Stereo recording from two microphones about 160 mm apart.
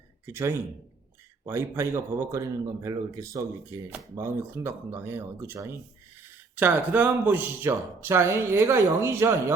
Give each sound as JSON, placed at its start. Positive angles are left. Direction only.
{"t": 0.3, "sound": "a man's voice", "side_deg": -15}